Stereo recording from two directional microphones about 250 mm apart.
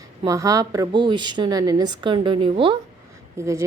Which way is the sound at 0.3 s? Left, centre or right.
Centre.